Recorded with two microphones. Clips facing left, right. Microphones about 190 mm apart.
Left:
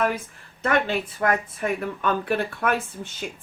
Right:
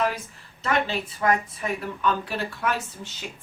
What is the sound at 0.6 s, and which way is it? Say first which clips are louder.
Speech: left 3 dB; 55° left (ahead or behind).